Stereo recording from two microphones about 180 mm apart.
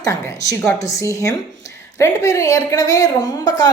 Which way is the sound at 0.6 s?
15° left (ahead or behind).